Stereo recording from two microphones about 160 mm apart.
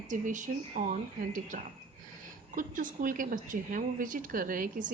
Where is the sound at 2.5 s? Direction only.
55° right (ahead or behind).